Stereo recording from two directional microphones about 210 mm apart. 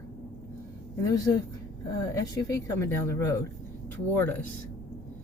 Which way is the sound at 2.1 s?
15° left (ahead or behind).